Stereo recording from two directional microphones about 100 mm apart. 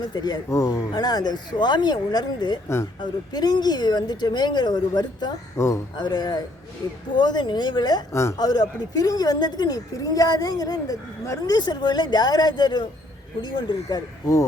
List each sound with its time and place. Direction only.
0.0 s a woman's voice: 45° left (ahead or behind)
0.5 s a woman's voice: 35° left (ahead or behind); by 5.3 s 50° left (ahead or behind)
5.5 s speech: 30° left (ahead or behind)
6.0 s a woman's voice: 45° left (ahead or behind)
8.1 s speech: 25° left (ahead or behind)
8.4 s a woman's voice: 45° left (ahead or behind)